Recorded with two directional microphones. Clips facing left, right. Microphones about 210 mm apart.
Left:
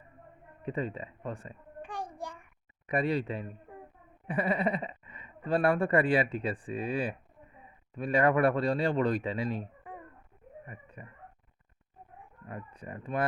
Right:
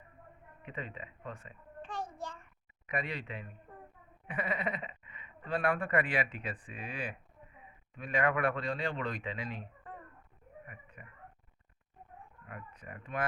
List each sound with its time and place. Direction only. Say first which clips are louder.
0.6 s speech: left 9 dB; 35° left (ahead or behind)
1.8 s child singing: left 2 dB; 15° left (ahead or behind)
2.8 s speech: left 9 dB; 35° left (ahead or behind)
9.9 s a sound: left 3 dB; 15° left (ahead or behind)
10.7 s speech: left 5 dB; 35° left (ahead or behind)
12.5 s speech: left 6 dB; 30° left (ahead or behind)